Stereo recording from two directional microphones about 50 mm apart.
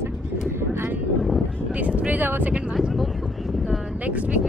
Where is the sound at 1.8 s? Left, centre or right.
Right.